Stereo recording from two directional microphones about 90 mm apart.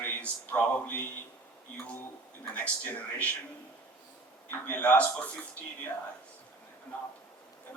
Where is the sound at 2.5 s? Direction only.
20° left (ahead or behind).